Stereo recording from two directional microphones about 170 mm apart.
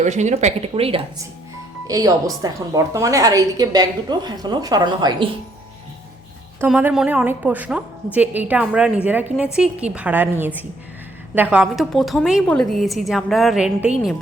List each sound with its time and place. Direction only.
0.0 s speech: 45° right (ahead or behind)
1.9 s a woman's voice: 20° right (ahead or behind)
6.7 s a woman's voice: 5° right (ahead or behind)